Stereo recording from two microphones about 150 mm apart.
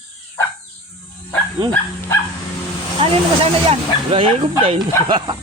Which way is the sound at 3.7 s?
40° right (ahead or behind).